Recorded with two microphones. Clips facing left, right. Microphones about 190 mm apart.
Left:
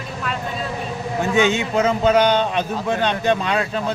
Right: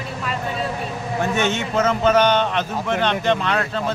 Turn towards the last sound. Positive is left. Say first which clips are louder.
# left 1 dB
turn(degrees=15)  # may be behind; listen again after turning